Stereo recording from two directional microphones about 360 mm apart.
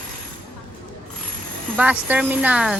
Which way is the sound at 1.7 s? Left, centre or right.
Centre.